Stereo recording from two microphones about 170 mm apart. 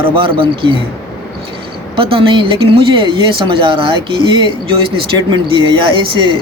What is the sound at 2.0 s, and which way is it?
Speech, 30° right (ahead or behind).